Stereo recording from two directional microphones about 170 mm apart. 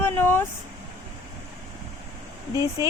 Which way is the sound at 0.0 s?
15° left (ahead or behind).